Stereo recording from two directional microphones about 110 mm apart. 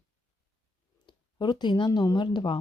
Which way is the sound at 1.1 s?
40° left (ahead or behind).